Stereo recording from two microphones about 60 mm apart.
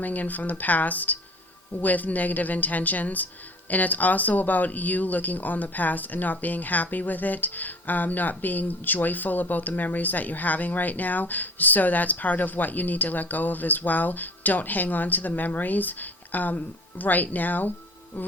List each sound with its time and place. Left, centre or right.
0.0 s speech: left